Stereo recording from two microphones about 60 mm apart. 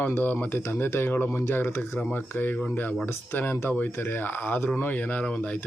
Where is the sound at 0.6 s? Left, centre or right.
Left.